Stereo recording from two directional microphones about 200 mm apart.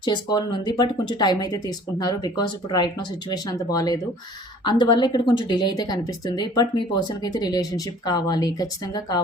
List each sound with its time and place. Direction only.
0.0 s speech: 20° left (ahead or behind)